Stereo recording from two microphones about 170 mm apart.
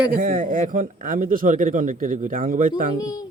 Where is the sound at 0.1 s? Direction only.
55° right (ahead or behind).